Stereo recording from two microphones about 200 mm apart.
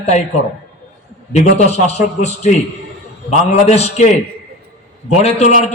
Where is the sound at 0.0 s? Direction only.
35° left (ahead or behind).